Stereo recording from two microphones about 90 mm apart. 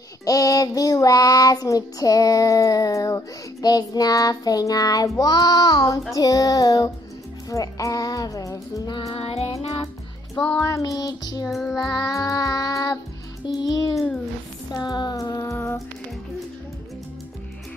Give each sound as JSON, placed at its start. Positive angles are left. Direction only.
{"t": 0.2, "sound": "child singing", "side_deg": 40}
{"t": 7.4, "sound": "music", "side_deg": 40}
{"t": 9.1, "sound": "music", "side_deg": 90}
{"t": 10.3, "sound": "music", "side_deg": 10}
{"t": 10.6, "sound": "child singing", "side_deg": 40}
{"t": 13.6, "sound": "music", "side_deg": 45}
{"t": 14.7, "sound": "a sound", "side_deg": 50}
{"t": 15.5, "sound": "music", "side_deg": 25}